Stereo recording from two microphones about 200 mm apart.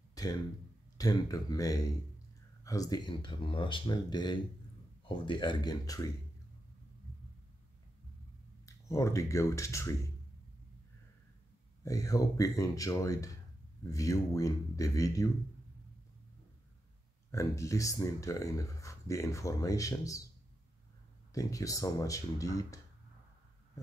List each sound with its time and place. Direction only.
0.1 s a sound: 20° left (ahead or behind)
0.9 s speech: 20° left (ahead or behind)
8.6 s speech: 15° left (ahead or behind)
11.8 s speech: 15° left (ahead or behind)
17.3 s speech: 15° left (ahead or behind)
21.3 s speech: 15° left (ahead or behind)